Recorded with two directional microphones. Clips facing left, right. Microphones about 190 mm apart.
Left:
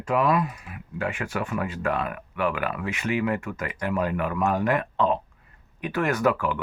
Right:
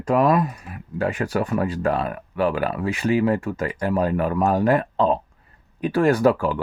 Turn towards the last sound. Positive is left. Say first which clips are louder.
# right 6 dB
turn(degrees=-30)  # may be behind; listen again after turning